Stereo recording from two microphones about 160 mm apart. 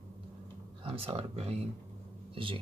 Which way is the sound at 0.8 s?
35° right (ahead or behind).